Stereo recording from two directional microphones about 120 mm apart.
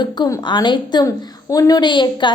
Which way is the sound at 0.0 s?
35° left (ahead or behind).